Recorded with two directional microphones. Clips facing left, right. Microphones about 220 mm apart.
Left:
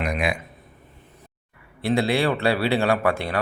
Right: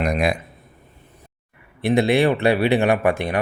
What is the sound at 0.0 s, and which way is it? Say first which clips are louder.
Speech: right 4 dB; 40° right (ahead or behind).